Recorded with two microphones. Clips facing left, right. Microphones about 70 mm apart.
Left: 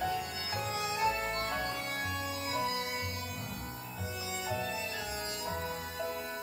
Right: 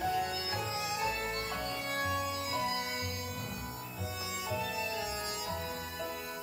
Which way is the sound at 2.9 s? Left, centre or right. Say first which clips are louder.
Even; left.